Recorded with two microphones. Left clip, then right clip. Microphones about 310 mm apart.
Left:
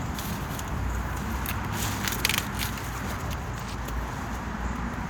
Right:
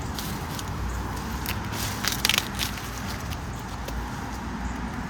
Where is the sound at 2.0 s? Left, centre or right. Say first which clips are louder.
Right 4 dB; centre.